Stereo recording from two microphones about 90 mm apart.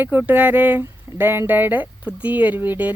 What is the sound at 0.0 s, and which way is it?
Speech, 25° right (ahead or behind).